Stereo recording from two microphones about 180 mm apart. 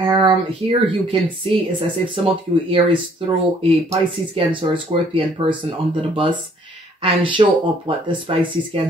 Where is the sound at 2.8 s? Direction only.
30° right (ahead or behind).